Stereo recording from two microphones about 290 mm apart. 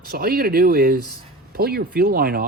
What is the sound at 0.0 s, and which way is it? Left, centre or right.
Speech, right.